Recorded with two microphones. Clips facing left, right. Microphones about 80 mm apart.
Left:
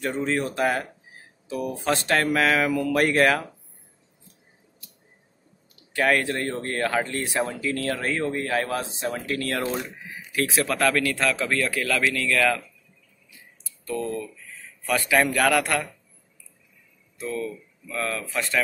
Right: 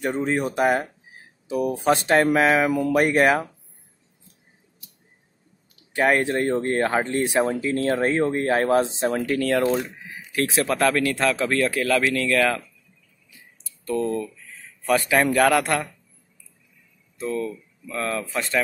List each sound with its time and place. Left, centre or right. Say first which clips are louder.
0.0 s speech: right 2 dB; centre
5.9 s a man's voice: right 3 dB; right
10.7 s a man's voice: right 3 dB; right
13.8 s a man's voice: right 4 dB; right
17.2 s speech: right 3 dB; right